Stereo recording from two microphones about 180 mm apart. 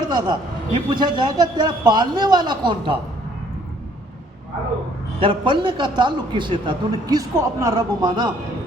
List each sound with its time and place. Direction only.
0.1 s a man's voice: 25° right (ahead or behind)
5.2 s a man's voice: 25° right (ahead or behind)